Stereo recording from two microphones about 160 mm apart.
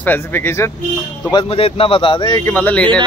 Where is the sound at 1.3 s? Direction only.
35° left (ahead or behind).